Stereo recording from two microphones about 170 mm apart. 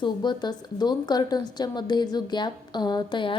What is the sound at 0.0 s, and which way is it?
Speech, 25° left (ahead or behind).